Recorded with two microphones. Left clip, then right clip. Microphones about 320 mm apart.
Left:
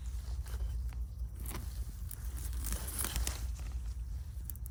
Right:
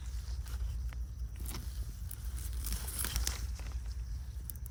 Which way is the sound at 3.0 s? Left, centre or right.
Left.